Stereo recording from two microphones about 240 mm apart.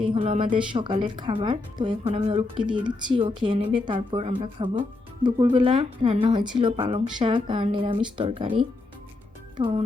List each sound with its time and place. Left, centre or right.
0.0 s a woman's voice: right